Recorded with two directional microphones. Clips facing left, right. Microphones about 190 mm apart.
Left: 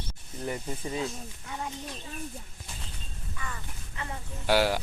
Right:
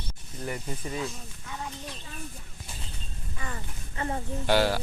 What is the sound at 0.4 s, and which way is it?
Speech, 20° left (ahead or behind).